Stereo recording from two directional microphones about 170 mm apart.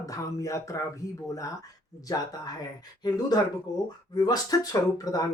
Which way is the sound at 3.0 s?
25° left (ahead or behind).